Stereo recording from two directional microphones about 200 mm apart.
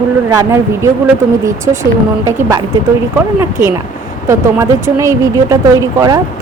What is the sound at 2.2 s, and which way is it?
A woman's voice, 15° right (ahead or behind).